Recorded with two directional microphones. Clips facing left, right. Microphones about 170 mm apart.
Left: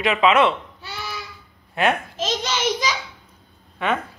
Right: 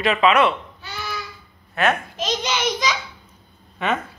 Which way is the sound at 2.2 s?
25° left (ahead or behind).